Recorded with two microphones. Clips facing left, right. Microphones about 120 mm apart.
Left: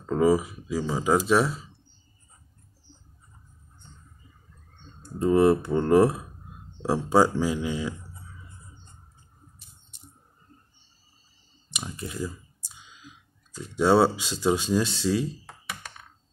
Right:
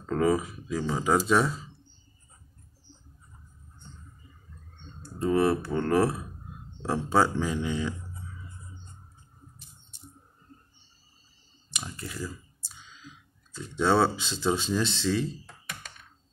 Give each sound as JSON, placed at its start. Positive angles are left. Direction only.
{"t": 0.0, "sound": "speech", "side_deg": 10}
{"t": 5.2, "sound": "speech", "side_deg": 15}
{"t": 11.7, "sound": "speech", "side_deg": 20}